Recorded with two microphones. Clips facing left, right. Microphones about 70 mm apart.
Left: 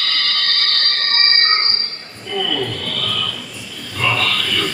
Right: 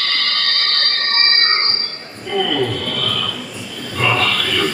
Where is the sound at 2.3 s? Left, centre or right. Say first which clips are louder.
Right 4 dB; centre.